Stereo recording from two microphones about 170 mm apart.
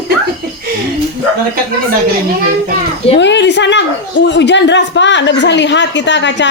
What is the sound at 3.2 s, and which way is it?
A woman's voice, 90° left.